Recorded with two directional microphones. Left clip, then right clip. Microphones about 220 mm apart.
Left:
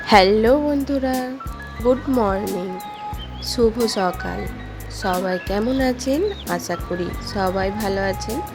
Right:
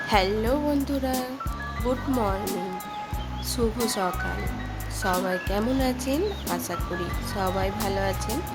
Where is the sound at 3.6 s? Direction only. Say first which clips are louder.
Left 10 dB; 15° left (ahead or behind).